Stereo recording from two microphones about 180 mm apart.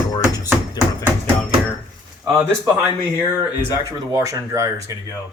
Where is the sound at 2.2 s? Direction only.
10° right (ahead or behind).